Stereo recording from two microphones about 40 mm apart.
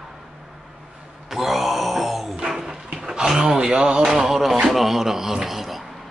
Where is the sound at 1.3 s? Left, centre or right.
Centre.